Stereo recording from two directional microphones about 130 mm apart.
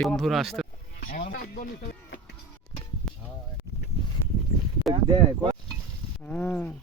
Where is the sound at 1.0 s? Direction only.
90° left.